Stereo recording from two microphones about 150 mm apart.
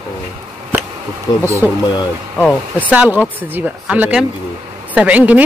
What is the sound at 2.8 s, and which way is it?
A man's voice, 10° right (ahead or behind).